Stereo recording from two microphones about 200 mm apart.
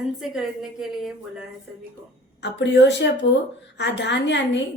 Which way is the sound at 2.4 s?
60° left (ahead or behind).